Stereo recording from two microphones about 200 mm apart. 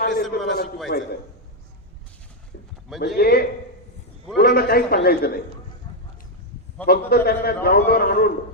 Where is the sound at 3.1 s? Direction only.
50° left (ahead or behind).